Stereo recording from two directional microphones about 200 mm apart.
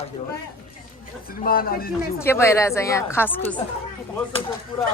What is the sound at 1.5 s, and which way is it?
Speech, 50° left (ahead or behind).